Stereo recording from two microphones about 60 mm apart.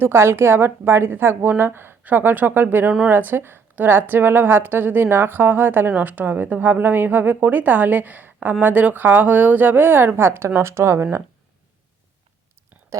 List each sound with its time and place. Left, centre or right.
0.0 s a woman's voice: right